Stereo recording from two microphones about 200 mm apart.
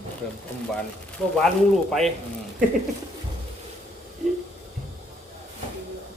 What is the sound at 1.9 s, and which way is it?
Speech, centre (ahead or behind).